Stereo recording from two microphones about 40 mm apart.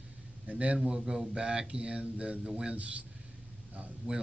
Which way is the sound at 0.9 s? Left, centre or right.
Centre.